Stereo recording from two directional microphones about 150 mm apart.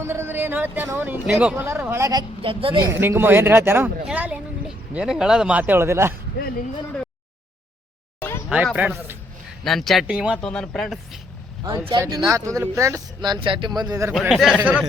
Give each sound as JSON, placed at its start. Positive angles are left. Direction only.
{"t": 0.0, "sound": "speech", "side_deg": -15}
{"t": 2.4, "sound": "a woman's voice", "side_deg": -35}
{"t": 2.9, "sound": "speech", "side_deg": -15}
{"t": 8.4, "sound": "speech", "side_deg": -10}
{"t": 10.4, "sound": "speech", "side_deg": 5}
{"t": 11.9, "sound": "speech", "side_deg": -20}
{"t": 14.1, "sound": "speech", "side_deg": -5}